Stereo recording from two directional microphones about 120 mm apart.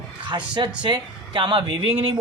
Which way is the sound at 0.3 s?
40° right (ahead or behind).